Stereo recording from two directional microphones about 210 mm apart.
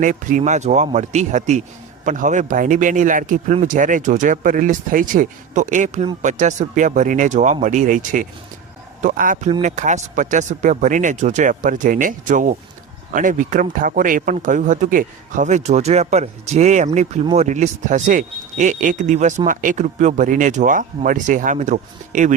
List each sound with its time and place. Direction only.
0.0 s speech: 40° right (ahead or behind)